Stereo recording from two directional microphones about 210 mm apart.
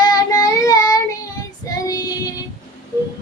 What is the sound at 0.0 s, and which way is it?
Child singing, 20° left (ahead or behind).